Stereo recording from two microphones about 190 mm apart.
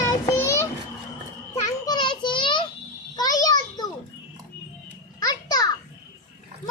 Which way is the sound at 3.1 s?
20° left (ahead or behind).